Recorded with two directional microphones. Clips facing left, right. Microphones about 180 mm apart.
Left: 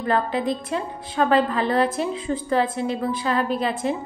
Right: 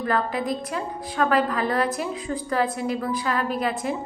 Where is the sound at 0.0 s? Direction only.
25° left (ahead or behind).